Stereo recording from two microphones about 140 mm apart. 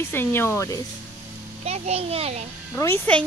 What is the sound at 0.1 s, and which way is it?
Speech, 15° left (ahead or behind).